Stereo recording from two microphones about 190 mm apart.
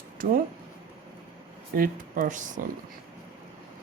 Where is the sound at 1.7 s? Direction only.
50° right (ahead or behind).